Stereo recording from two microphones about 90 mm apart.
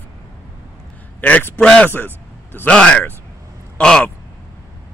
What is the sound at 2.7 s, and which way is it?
Speech, 10° left (ahead or behind).